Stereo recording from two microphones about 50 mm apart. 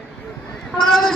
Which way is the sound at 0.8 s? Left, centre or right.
Centre.